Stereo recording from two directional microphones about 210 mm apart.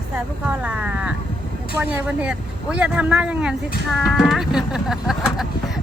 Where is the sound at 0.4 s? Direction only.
5° right (ahead or behind).